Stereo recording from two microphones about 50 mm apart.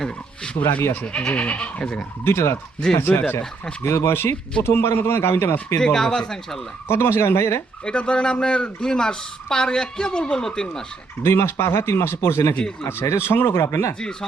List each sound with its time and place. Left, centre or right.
1.0 s speech: left
2.2 s speech: left
3.0 s speech: left
3.8 s speech: left
5.8 s speech: centre
6.8 s speech: left
7.9 s speech: centre
11.2 s speech: left
14.0 s speech: centre